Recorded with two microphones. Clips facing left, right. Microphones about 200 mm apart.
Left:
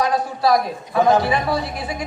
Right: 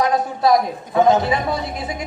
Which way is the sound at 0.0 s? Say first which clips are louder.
Right 1 dB; 20° right (ahead or behind).